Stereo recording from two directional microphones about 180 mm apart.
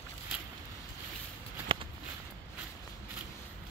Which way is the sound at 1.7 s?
30° right (ahead or behind).